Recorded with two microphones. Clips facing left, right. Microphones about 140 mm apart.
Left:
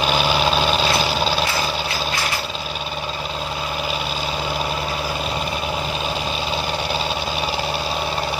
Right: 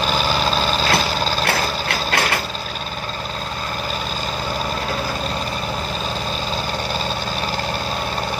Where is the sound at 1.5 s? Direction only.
65° right (ahead or behind).